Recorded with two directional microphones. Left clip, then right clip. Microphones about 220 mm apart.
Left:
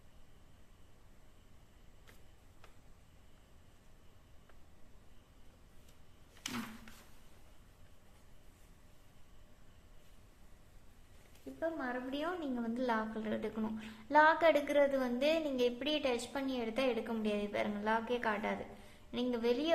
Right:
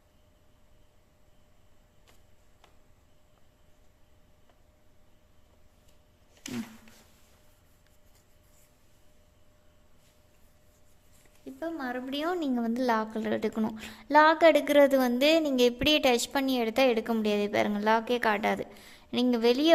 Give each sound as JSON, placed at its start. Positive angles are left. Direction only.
{"t": 11.6, "sound": "a woman's voice", "side_deg": -50}